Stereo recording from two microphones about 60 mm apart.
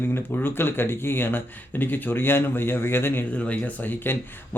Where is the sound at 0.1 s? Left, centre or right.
Left.